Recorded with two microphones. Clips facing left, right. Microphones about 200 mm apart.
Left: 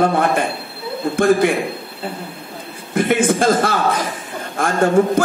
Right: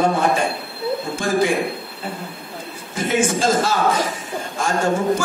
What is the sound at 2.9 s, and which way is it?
A man's voice, 55° left (ahead or behind).